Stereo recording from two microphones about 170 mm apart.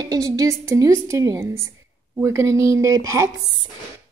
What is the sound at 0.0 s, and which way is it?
Speech, 20° right (ahead or behind).